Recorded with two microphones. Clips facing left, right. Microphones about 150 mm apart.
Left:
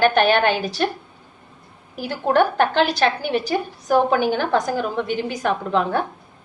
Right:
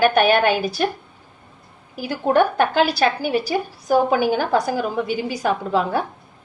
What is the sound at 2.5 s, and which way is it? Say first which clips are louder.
A woman's voice: even; 10° right (ahead or behind).